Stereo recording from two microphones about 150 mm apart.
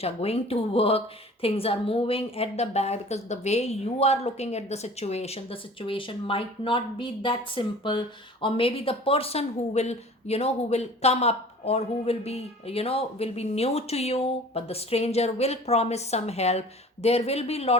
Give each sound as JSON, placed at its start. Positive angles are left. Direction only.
{"t": 0.0, "sound": "a woman's voice", "side_deg": 40}